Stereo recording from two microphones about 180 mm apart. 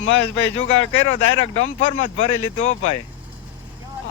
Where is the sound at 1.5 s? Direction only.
40° left (ahead or behind).